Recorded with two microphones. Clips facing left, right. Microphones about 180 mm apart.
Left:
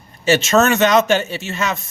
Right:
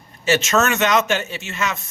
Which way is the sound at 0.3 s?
30° left (ahead or behind).